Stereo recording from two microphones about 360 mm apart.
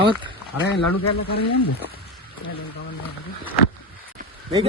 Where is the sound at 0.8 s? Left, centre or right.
Left.